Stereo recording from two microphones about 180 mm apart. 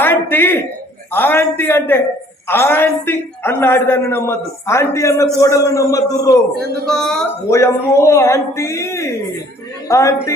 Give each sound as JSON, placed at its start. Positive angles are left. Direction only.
{"t": 0.0, "sound": "a sound", "side_deg": 10}
{"t": 1.1, "sound": "a man's voice", "side_deg": 10}
{"t": 6.8, "sound": "a woman's voice", "side_deg": 5}
{"t": 7.4, "sound": "a man's voice", "side_deg": 15}